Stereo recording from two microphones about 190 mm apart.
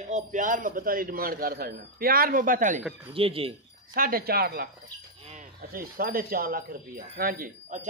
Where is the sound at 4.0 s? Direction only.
50° right (ahead or behind).